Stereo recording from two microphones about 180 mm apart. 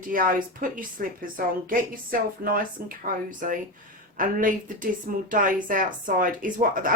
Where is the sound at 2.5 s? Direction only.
50° right (ahead or behind).